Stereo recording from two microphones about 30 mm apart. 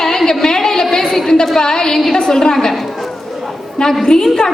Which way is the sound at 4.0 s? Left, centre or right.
Centre.